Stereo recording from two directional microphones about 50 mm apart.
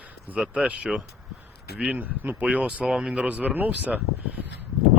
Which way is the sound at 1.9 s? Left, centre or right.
Right.